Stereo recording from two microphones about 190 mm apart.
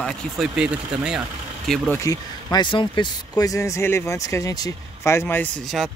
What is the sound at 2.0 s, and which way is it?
Speech, 20° left (ahead or behind).